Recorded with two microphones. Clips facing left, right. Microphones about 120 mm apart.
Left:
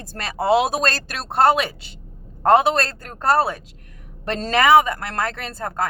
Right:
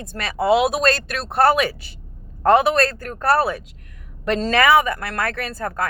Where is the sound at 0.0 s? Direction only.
35° left (ahead or behind).